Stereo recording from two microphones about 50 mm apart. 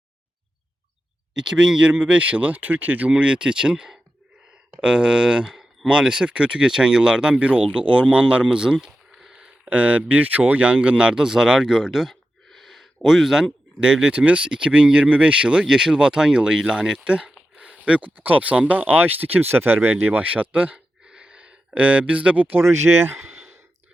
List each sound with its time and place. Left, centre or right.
1.3 s speech: centre; by 3.1 s right
3.1 s speech: centre
8.9 s a sound: centre
9.6 s speech: right; by 13.8 s centre
13.8 s speech: right
21.0 s a sound: right
21.7 s speech: right
22.5 s speech: right
23.3 s sigh: centre